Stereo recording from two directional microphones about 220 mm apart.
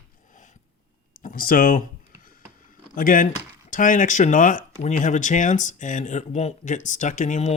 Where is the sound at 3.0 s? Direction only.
40° left (ahead or behind).